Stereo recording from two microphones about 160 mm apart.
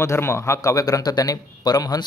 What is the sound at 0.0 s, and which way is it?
Speech, 15° left (ahead or behind).